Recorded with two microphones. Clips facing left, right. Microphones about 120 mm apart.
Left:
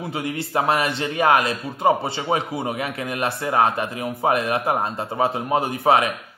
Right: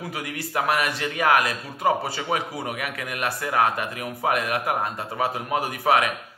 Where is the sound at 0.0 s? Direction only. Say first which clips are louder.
Left 5 dB; 25° left (ahead or behind).